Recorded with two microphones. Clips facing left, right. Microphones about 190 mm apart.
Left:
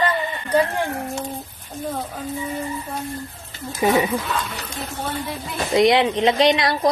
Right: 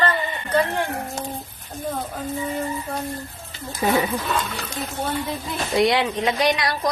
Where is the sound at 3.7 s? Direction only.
10° left (ahead or behind).